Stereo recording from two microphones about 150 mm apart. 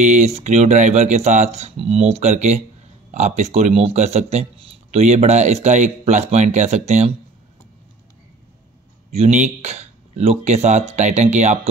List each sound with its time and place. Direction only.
0.0 s speech: 50° right (ahead or behind)
9.1 s speech: 50° right (ahead or behind)